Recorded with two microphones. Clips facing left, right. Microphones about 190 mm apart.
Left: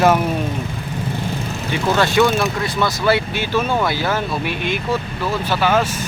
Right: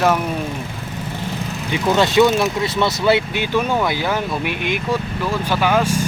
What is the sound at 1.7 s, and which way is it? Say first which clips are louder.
Speech: right 1 dB; 20° right (ahead or behind).